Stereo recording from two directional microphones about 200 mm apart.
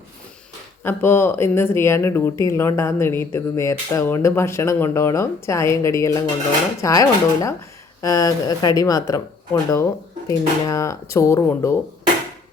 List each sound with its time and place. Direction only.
0.9 s speech: 10° left (ahead or behind)